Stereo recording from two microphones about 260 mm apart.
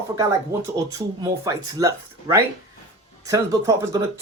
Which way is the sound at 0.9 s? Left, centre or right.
Centre.